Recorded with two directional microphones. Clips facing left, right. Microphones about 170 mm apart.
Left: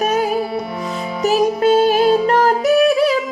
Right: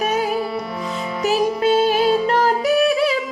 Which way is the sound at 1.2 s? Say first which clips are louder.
Left 3 dB; 45° left (ahead or behind).